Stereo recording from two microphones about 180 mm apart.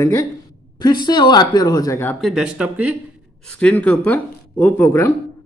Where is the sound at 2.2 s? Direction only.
5° right (ahead or behind).